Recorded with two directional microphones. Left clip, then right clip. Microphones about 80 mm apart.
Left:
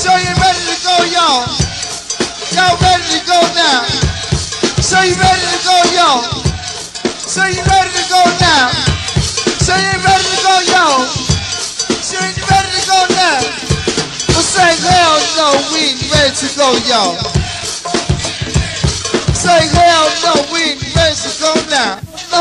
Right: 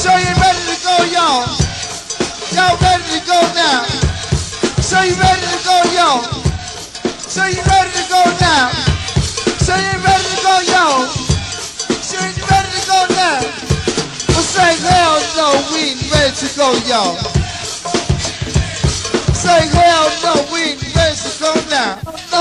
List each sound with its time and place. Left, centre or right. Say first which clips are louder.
0.0 s music: left 1 dB; left
5.7 s music: left 2 dB; left
18.5 s music: left 2 dB; left